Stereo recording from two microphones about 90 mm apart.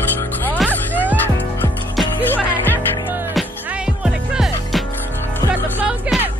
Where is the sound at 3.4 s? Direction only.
5° right (ahead or behind).